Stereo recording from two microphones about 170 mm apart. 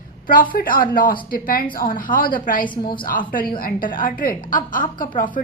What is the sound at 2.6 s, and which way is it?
Speech, 30° left (ahead or behind).